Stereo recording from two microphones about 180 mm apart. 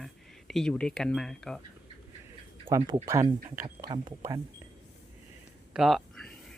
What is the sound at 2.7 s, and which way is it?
Speech, 20° right (ahead or behind).